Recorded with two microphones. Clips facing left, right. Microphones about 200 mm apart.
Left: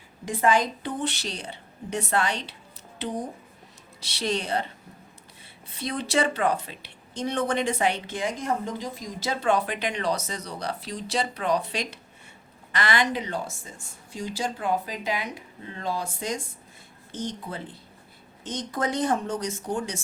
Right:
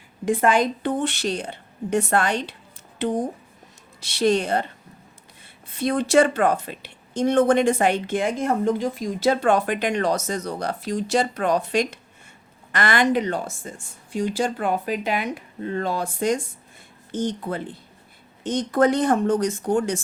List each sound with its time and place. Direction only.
0.3 s speech: 55° right (ahead or behind)
5.7 s speech: 50° right (ahead or behind)
18.4 s speech: 55° right (ahead or behind)